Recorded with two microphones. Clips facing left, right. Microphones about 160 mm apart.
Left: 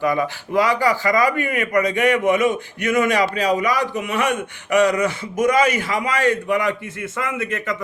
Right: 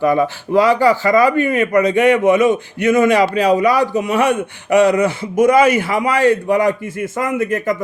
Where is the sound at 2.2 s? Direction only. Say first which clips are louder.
Right 5 dB; 50° right (ahead or behind).